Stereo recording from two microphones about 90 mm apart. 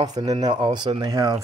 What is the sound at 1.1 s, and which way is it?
Speech, 45° right (ahead or behind).